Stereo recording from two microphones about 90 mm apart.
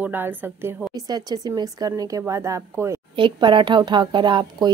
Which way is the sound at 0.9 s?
45° right (ahead or behind).